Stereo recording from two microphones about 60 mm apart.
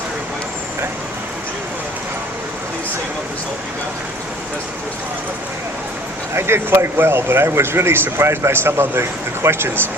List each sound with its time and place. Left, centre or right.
6.3 s speech: right